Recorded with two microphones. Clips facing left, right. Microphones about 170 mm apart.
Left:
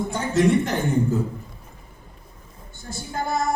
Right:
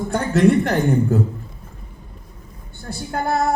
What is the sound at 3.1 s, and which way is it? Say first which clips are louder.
Music: right 4 dB; 65° right (ahead or behind).